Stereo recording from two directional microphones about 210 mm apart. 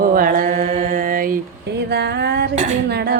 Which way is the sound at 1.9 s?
50° right (ahead or behind).